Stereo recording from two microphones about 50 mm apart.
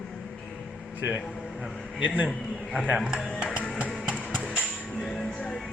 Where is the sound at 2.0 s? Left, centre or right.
Right.